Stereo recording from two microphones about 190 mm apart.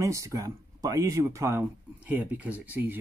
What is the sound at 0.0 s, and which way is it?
A man's voice, 15° right (ahead or behind).